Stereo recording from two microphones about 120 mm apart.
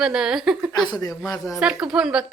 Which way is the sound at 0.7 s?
35° left (ahead or behind).